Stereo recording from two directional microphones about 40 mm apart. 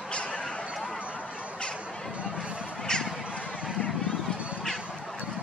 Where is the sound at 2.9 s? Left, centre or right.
Centre.